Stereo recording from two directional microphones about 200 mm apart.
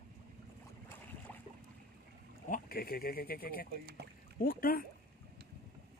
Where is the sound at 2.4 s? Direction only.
45° left (ahead or behind).